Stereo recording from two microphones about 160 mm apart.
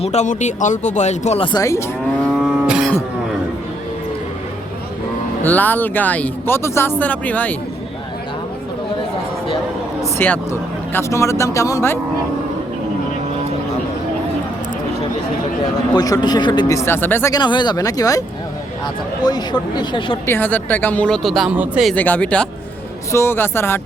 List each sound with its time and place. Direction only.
0.0 s speech: 45° left (ahead or behind)
1.5 s speech: 20° left (ahead or behind)
2.3 s cattle: 5° right (ahead or behind)
5.5 s speech: 10° left (ahead or behind)
10.0 s speech: 10° left (ahead or behind)
15.9 s speech: 25° left (ahead or behind)
17.4 s speech: 30° left (ahead or behind)
19.2 s speech: 25° left (ahead or behind)
20.2 s speech: 15° left (ahead or behind)
21.5 s speech: 10° right (ahead or behind)
21.8 s speech: 10° left (ahead or behind)